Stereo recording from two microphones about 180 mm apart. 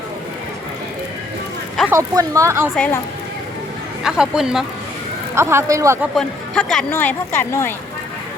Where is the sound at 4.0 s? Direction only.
5° right (ahead or behind).